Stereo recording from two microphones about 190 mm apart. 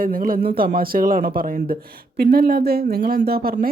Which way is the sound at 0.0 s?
50° right (ahead or behind).